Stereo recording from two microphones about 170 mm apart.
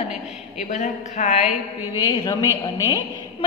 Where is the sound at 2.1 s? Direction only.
20° left (ahead or behind).